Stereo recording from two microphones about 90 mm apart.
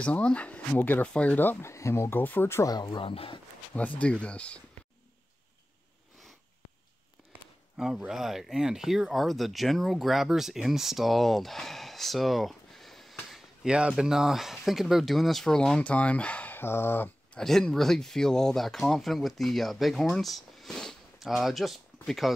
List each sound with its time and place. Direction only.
0.0 s speech: 15° left (ahead or behind)
2.6 s speech: 50° left (ahead or behind)
3.0 s speech: 75° left (ahead or behind)
4.0 s speech: 15° left (ahead or behind)
7.7 s speech: 5° right (ahead or behind)
13.7 s speech: 10° right (ahead or behind); by 17.1 s 25° left (ahead or behind)
17.3 s speech: 5° left (ahead or behind)